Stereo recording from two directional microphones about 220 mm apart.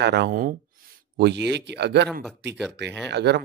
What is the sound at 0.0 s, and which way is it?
Speech, 50° right (ahead or behind).